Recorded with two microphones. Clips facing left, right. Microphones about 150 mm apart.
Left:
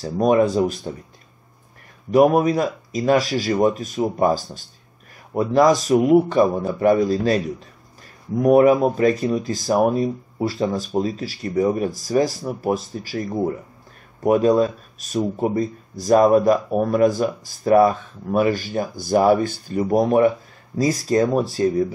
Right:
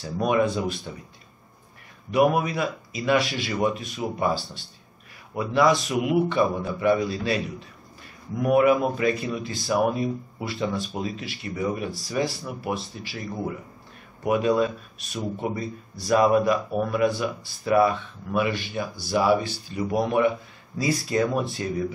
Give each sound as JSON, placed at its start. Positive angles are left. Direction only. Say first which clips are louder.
{"t": 0.0, "sound": "speech", "louder": "left 6 dB", "side_deg": 35}
{"t": 2.0, "sound": "speech", "louder": "left 6 dB", "side_deg": 40}